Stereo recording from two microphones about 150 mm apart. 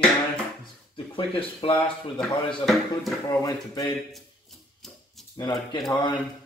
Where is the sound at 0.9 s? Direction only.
35° left (ahead or behind).